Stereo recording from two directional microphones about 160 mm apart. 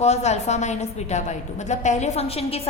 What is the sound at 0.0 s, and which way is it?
A woman's voice, 45° left (ahead or behind).